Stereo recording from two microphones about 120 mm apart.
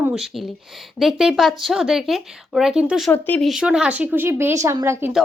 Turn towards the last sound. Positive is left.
turn(degrees=-25)  # may be behind; listen again after turning